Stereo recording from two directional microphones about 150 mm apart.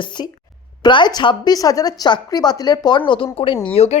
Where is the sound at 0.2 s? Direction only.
30° left (ahead or behind).